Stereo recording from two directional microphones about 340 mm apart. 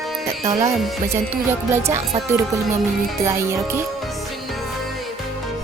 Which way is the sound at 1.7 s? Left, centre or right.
Centre.